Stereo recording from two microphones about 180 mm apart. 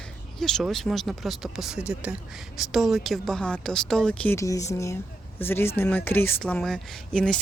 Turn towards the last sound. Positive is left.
turn(degrees=5)  # may be behind; listen again after turning